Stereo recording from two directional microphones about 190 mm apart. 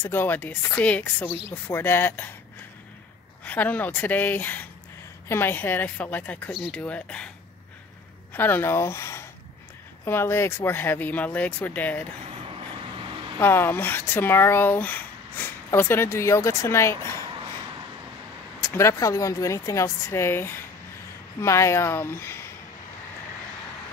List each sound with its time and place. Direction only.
0.0 s speech: 10° left (ahead or behind)
3.4 s speech: 10° left (ahead or behind)
8.3 s speech: 10° left (ahead or behind)
12.4 s vehicle: 30° right (ahead or behind)
13.4 s speech: 10° left (ahead or behind)
18.6 s speech: 15° left (ahead or behind)